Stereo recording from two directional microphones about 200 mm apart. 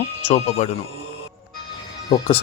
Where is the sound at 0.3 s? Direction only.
35° left (ahead or behind).